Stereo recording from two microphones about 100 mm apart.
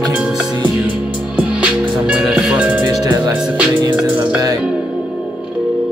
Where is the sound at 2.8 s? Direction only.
45° right (ahead or behind).